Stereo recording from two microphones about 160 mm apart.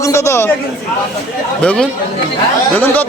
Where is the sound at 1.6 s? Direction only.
5° left (ahead or behind).